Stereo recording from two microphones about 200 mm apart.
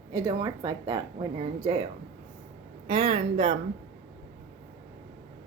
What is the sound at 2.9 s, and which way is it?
Speech, 30° right (ahead or behind).